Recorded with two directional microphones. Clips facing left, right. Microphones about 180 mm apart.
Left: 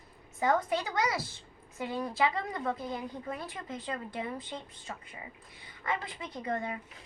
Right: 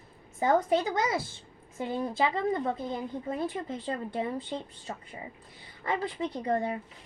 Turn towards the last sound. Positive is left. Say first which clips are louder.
# right 5 dB
turn(degrees=-35)  # may be behind; listen again after turning